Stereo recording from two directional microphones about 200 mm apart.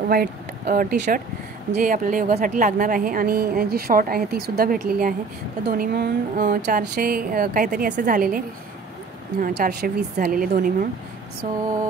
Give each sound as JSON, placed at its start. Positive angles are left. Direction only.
{"t": 0.1, "sound": "a woman's voice", "side_deg": -45}
{"t": 9.4, "sound": "a woman's voice", "side_deg": -55}
{"t": 11.4, "sound": "a sound", "side_deg": -40}